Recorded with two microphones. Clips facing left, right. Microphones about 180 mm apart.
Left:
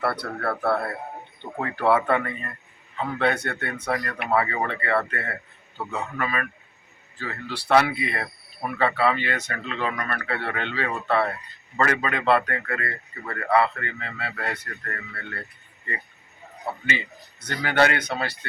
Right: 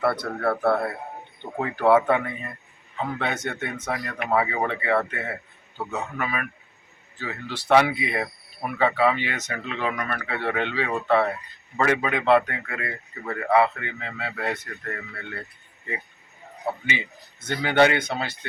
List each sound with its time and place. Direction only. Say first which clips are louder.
0.0 s speech: right 3 dB; 15° right (ahead or behind)
3.8 s speech: left 2 dB; 5° right (ahead or behind)
16.9 s speech: even; 15° right (ahead or behind)